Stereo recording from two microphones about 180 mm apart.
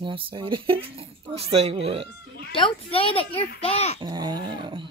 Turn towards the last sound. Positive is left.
turn(degrees=-25)  # may be behind; listen again after turning